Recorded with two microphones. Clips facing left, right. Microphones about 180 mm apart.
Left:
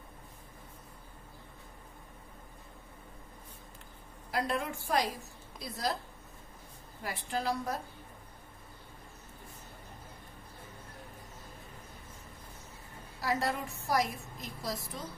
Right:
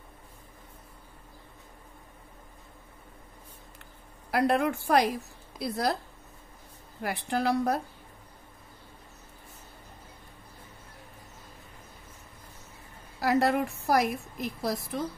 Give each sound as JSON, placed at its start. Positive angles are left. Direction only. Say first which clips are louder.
{"t": 4.3, "sound": "a woman's voice", "louder": "right 8 dB", "side_deg": -65}
{"t": 7.0, "sound": "a woman's voice", "louder": "right 6 dB", "side_deg": -65}
{"t": 13.2, "sound": "a woman's voice", "louder": "right 8 dB", "side_deg": -70}